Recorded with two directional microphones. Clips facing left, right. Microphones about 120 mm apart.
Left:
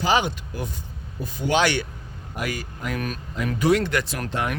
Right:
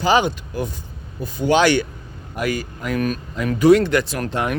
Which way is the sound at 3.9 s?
30° right (ahead or behind).